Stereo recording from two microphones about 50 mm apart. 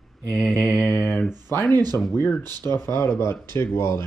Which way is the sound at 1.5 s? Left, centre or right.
Left.